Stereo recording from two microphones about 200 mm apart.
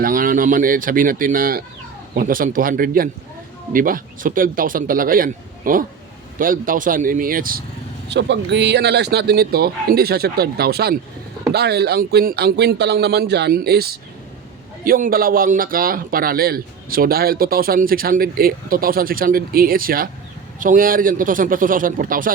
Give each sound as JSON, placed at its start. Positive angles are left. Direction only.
{"t": 0.0, "sound": "speech", "side_deg": -45}
{"t": 8.1, "sound": "speech", "side_deg": -60}